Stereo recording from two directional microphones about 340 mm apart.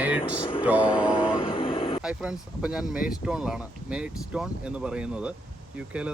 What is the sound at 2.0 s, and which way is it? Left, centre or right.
Speech, centre.